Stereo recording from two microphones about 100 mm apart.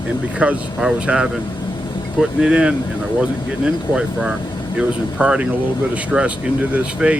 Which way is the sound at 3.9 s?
5° right (ahead or behind).